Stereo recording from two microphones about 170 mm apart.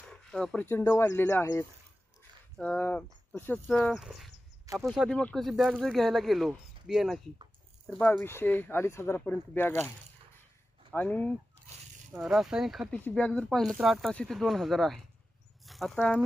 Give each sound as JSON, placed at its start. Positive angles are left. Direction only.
{"t": 0.1, "sound": "speech", "side_deg": 5}
{"t": 3.7, "sound": "speech", "side_deg": 0}
{"t": 7.9, "sound": "speech", "side_deg": 10}
{"t": 10.9, "sound": "speech", "side_deg": 10}
{"t": 12.1, "sound": "speech", "side_deg": 0}
{"t": 12.9, "sound": "speech", "side_deg": 10}